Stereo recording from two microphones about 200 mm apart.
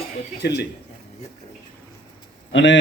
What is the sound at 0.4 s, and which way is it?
Speech, 55° left (ahead or behind).